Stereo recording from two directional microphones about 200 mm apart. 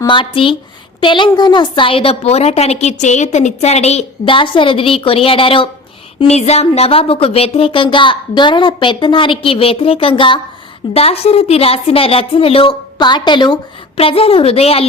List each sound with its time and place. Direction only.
0.0 s a woman's voice: 25° left (ahead or behind)